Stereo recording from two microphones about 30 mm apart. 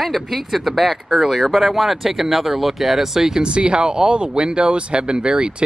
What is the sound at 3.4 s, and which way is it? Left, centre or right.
Speech, right.